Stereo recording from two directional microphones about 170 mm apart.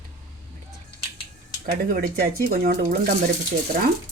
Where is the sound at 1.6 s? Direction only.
60° right (ahead or behind).